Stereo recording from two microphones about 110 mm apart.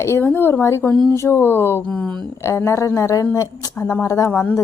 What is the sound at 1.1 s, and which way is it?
Speech, 25° left (ahead or behind).